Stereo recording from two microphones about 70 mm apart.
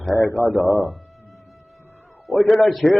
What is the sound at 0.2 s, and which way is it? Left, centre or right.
Speech, left.